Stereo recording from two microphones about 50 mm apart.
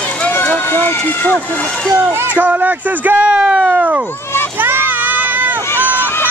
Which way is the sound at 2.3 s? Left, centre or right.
Right.